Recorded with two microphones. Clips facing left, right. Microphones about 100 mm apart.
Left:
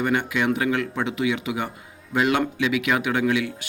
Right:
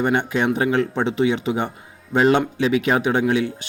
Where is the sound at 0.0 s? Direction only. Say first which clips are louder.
Right 3 dB; 30° right (ahead or behind).